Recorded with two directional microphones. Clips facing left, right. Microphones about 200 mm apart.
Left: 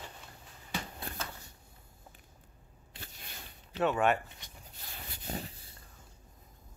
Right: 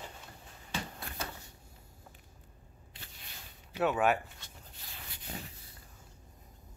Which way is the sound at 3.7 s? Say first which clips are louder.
Even; 5° right (ahead or behind).